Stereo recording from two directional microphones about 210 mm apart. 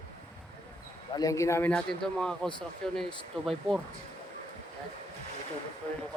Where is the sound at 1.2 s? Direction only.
15° left (ahead or behind); by 3.8 s centre (ahead or behind).